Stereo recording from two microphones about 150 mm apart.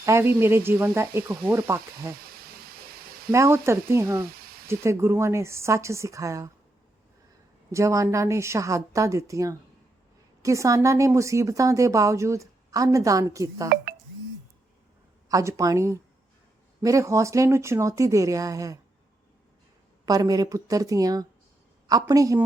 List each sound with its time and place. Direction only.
0.0 s speech: 15° right (ahead or behind)
2.4 s a sound: 90° right
3.3 s speech: 20° right (ahead or behind)
4.3 s a sound: 90° right
4.7 s speech: 20° right (ahead or behind)
7.7 s speech: 20° right (ahead or behind)
15.3 s speech: 20° right (ahead or behind)
20.1 s speech: 25° right (ahead or behind)